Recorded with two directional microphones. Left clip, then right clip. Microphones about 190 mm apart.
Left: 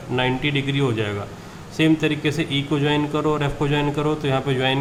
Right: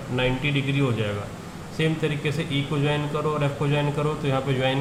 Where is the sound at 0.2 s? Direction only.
45° left (ahead or behind).